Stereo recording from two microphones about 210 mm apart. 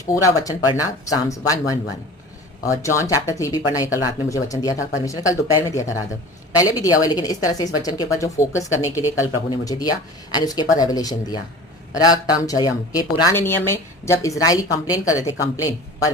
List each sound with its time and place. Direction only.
0.1 s speech: 15° left (ahead or behind)